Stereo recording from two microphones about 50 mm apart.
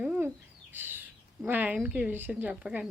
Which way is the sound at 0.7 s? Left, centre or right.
Right.